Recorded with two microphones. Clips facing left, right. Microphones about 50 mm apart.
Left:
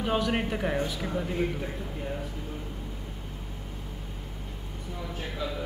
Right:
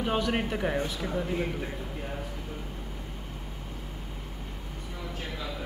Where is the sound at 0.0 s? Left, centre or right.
Centre.